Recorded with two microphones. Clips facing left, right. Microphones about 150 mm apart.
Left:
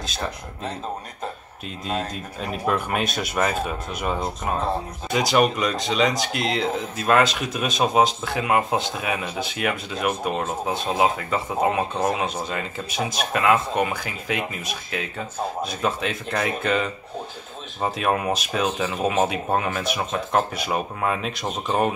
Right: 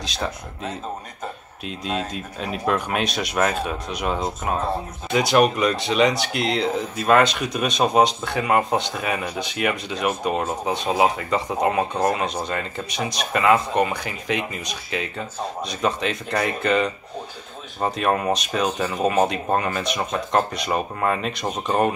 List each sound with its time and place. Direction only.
0.0 s speech: centre (ahead or behind)
1.9 s speech: centre (ahead or behind)